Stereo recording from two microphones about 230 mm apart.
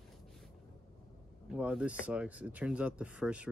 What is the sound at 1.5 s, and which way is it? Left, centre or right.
Speech, centre.